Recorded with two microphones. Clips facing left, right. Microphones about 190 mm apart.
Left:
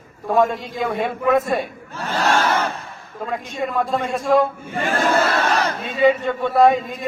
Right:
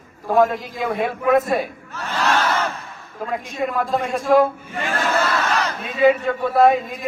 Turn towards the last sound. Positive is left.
turn(degrees=0)  # may be behind; listen again after turning